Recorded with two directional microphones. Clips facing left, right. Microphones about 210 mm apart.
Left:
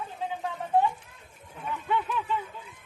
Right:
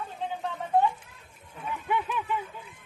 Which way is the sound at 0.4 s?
Centre (ahead or behind).